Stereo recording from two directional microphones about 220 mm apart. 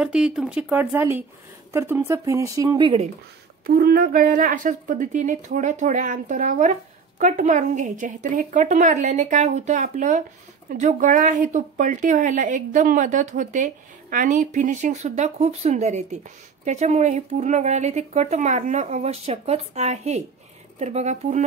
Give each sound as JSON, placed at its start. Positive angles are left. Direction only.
{"t": 0.0, "sound": "speech", "side_deg": -5}
{"t": 3.6, "sound": "speech", "side_deg": -40}